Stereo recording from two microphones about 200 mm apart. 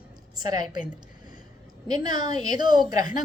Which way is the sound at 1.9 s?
20° right (ahead or behind).